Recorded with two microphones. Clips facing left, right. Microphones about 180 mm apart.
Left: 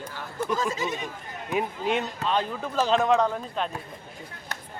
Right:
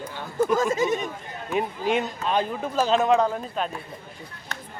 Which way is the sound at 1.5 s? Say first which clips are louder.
Right 2 dB; centre (ahead or behind).